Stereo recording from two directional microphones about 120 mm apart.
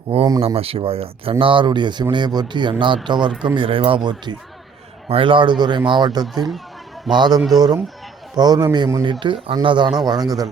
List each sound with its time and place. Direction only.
0.1 s speech: 50° right (ahead or behind); by 9.0 s 30° right (ahead or behind)
9.2 s speech: 45° right (ahead or behind); by 10.5 s 30° right (ahead or behind)